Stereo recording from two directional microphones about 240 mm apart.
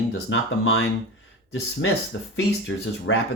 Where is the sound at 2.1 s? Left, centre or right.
Left.